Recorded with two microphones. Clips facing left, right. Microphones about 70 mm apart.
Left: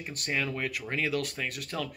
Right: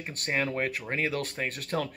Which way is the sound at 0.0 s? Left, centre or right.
Right.